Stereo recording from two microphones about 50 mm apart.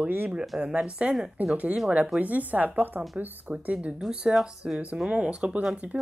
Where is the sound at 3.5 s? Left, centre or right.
Right.